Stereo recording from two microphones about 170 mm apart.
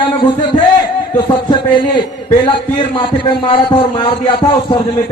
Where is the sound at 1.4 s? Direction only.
30° left (ahead or behind).